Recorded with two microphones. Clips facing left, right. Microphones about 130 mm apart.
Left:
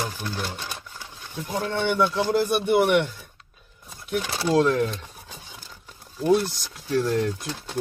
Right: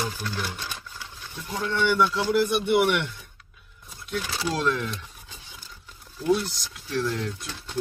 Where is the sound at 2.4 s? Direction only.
40° left (ahead or behind).